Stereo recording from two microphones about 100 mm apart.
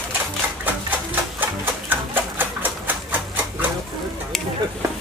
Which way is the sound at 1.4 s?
20° right (ahead or behind).